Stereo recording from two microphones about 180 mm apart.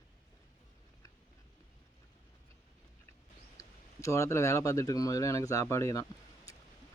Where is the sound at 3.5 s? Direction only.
15° left (ahead or behind).